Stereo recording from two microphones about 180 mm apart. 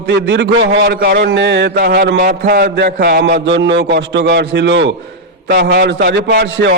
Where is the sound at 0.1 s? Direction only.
70° right (ahead or behind).